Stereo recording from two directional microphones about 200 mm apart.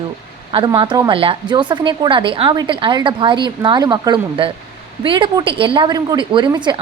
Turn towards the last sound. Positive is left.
turn(degrees=-20)  # may be behind; listen again after turning